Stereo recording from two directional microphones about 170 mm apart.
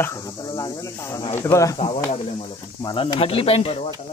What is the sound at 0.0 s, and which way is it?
Speech, 20° left (ahead or behind).